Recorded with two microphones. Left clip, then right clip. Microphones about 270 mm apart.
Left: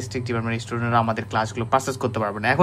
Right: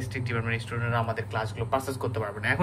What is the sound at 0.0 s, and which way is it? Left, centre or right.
A man's voice, centre.